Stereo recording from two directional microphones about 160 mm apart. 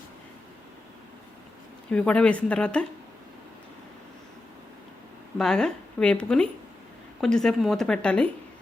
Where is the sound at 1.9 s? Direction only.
10° left (ahead or behind).